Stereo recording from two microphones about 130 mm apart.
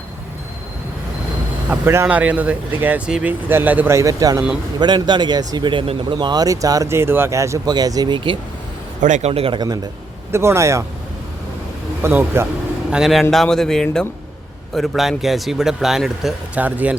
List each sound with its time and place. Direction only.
1.7 s speech: 20° right (ahead or behind); by 8.4 s 40° right (ahead or behind)
9.0 s a man's voice: 70° right (ahead or behind); by 9.6 s 50° right (ahead or behind)
9.6 s speech: 30° right (ahead or behind)
10.3 s speech: 20° right (ahead or behind)
12.0 s speech: 20° right (ahead or behind)
12.9 s speech: centre (ahead or behind)